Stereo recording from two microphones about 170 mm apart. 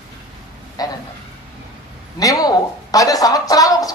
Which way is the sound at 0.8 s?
20° left (ahead or behind).